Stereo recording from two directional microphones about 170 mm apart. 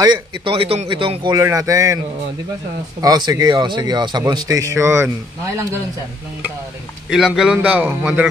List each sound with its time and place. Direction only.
0.0 s a man's voice: 30° right (ahead or behind)
3.0 s a man's voice: 20° right (ahead or behind)
7.1 s a man's voice: 5° right (ahead or behind)